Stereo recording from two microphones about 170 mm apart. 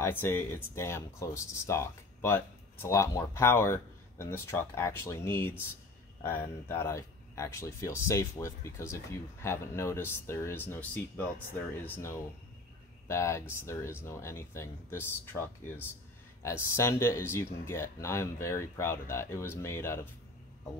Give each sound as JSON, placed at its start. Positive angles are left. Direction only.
{"t": 0.0, "sound": "speech", "side_deg": 15}